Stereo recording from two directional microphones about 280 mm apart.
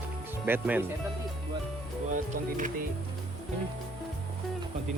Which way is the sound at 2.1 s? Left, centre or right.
Right.